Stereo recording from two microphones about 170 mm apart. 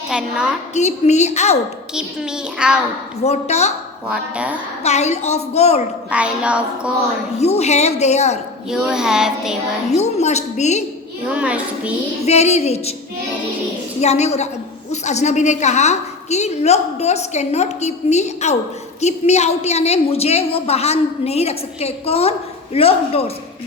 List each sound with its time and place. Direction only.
0.1 s a woman's voice: 5° right (ahead or behind)
0.7 s a woman's voice: 40° left (ahead or behind)
1.9 s a woman's voice: 5° right (ahead or behind)
3.2 s a woman's voice: 40° left (ahead or behind)
4.1 s a sound: 5° right (ahead or behind)
4.8 s a woman's voice: 40° left (ahead or behind)
6.1 s a sound: 5° right (ahead or behind)
7.3 s a woman's voice: 40° left (ahead or behind)
8.7 s a woman's voice: 5° right (ahead or behind)
9.9 s a woman's voice: 40° left (ahead or behind)
11.3 s a sound: 5° right (ahead or behind)
12.2 s a woman's voice: 40° left (ahead or behind)
14.0 s a woman's voice: 40° left (ahead or behind)